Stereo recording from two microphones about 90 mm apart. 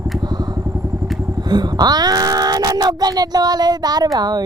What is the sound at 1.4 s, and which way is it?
Speech, 50° right (ahead or behind).